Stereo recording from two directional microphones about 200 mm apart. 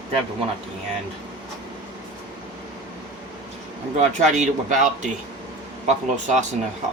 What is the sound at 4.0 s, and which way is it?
A man's voice, 35° right (ahead or behind).